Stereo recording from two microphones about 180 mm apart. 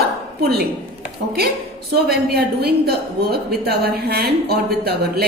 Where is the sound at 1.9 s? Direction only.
60° right (ahead or behind).